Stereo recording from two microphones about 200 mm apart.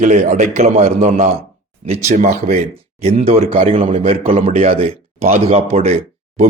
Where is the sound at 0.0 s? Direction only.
35° right (ahead or behind).